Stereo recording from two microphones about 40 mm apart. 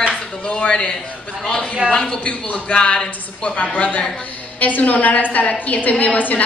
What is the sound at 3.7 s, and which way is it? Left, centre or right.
A woman's voice, left.